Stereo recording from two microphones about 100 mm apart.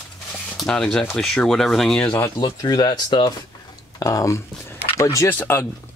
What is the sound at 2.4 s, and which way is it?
Speech, 40° left (ahead or behind).